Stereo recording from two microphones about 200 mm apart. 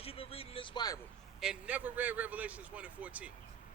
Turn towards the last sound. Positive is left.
turn(degrees=-5)  # may be behind; listen again after turning